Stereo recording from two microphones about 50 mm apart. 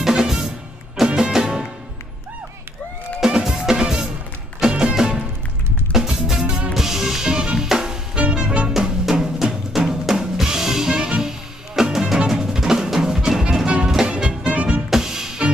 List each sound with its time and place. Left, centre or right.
0.0 s music: centre
3.3 s drum kit: centre
4.6 s music: centre
6.4 s music: right
6.7 s music: centre; by 14.8 s right
14.9 s music: centre